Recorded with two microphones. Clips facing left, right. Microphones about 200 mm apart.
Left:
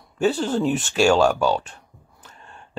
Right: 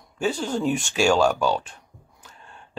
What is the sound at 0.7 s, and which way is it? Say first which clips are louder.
Speech: left 3 dB; 5° left (ahead or behind).